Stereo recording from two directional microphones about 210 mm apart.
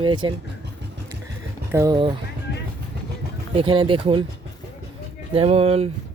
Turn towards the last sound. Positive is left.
turn(degrees=-30)  # may be behind; listen again after turning